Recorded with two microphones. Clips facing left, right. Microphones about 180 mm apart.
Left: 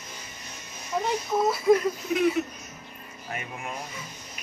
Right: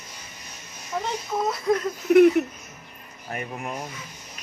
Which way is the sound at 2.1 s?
60° right (ahead or behind).